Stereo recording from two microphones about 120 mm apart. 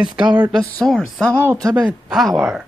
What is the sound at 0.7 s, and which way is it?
Speech, 10° left (ahead or behind).